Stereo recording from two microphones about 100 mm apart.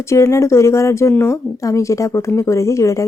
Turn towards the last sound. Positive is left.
turn(degrees=30)  # may be behind; listen again after turning